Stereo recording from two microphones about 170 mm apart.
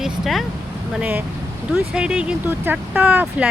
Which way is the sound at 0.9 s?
10° right (ahead or behind).